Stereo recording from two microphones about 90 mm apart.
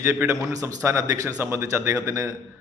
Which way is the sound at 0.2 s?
20° right (ahead or behind).